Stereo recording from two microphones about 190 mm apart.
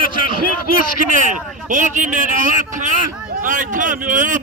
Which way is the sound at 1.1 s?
40° right (ahead or behind).